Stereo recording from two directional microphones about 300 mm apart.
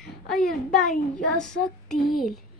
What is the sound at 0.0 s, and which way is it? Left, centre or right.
A woman's voice, centre.